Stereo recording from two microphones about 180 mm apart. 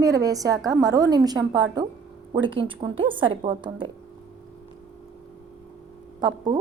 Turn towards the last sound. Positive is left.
turn(degrees=-20)  # may be behind; listen again after turning